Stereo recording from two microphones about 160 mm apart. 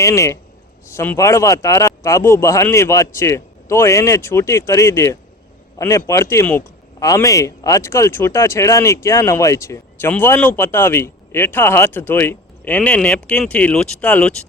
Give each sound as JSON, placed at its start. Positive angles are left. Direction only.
{"t": 0.0, "sound": "a man's voice", "side_deg": 20}